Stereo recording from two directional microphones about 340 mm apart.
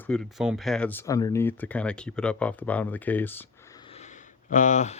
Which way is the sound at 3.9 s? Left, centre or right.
Centre.